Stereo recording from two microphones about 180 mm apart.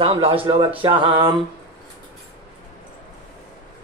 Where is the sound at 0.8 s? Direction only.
30° right (ahead or behind).